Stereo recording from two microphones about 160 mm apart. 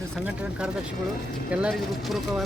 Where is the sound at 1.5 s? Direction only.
5° right (ahead or behind).